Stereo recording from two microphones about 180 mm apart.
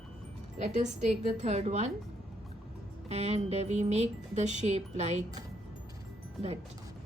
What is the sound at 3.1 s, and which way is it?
Speech, 35° right (ahead or behind).